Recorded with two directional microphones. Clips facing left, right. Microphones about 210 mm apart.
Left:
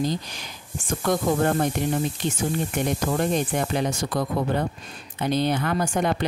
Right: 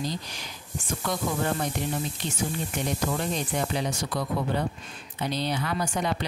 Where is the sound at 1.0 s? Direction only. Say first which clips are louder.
Left 7 dB; 50° left (ahead or behind).